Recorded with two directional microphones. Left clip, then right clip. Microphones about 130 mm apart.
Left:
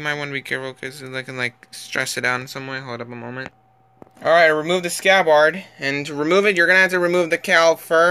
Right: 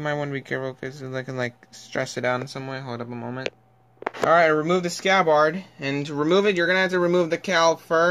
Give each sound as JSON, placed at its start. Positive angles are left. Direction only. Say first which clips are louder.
{"t": 0.0, "sound": "speech", "louder": "left 3 dB", "side_deg": -45}